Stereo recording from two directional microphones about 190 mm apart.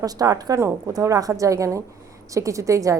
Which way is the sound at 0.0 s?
20° right (ahead or behind).